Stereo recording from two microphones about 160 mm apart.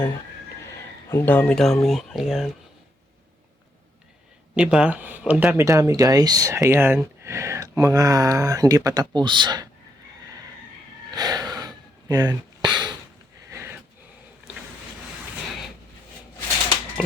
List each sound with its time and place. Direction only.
1.1 s speech: 10° left (ahead or behind)
4.5 s speech: 5° right (ahead or behind); by 9.6 s 25° right (ahead or behind)
11.1 s gasp: 25° right (ahead or behind)
13.5 s sniff: 15° right (ahead or behind)